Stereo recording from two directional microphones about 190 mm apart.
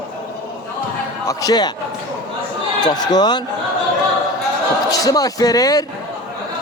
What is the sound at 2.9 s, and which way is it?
Speech, 20° left (ahead or behind).